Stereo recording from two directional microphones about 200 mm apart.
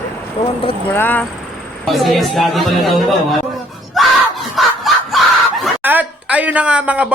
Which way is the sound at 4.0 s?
Centre (ahead or behind).